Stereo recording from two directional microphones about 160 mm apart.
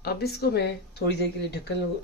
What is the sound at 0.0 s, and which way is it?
Speech, 80° left.